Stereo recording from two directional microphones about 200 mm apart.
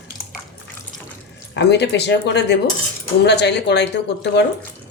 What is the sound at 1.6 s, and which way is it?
Speech, 60° left (ahead or behind).